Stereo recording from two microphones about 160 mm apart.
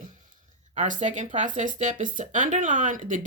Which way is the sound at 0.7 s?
50° right (ahead or behind).